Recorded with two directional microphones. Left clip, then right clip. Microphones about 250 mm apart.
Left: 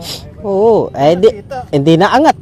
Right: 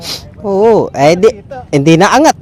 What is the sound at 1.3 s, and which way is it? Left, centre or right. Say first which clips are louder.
Speech: left 3 dB; left.